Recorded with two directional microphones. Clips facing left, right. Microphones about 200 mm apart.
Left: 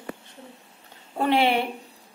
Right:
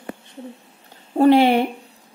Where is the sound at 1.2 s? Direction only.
40° right (ahead or behind).